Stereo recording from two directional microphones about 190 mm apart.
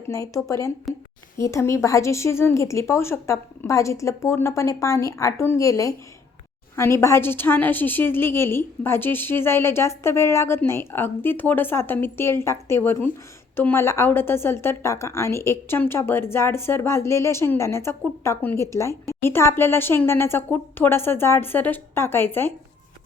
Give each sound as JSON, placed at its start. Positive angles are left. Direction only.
{"t": 0.1, "sound": "a woman's voice", "side_deg": 15}